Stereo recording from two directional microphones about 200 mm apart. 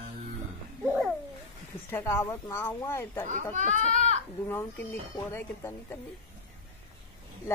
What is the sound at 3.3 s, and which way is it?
Speech, 40° right (ahead or behind).